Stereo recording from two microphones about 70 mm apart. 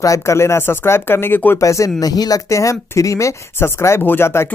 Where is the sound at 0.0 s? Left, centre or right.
Left.